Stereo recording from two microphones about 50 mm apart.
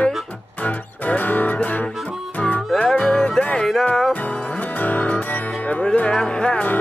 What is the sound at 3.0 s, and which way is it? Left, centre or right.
Music, left.